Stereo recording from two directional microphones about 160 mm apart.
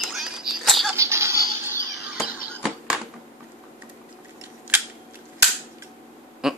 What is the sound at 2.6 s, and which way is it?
Typewriter, 5° right (ahead or behind).